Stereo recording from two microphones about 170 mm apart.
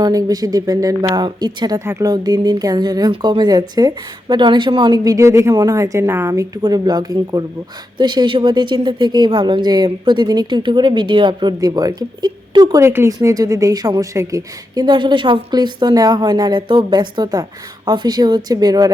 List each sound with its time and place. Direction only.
0.0 s a woman's voice: 20° right (ahead or behind)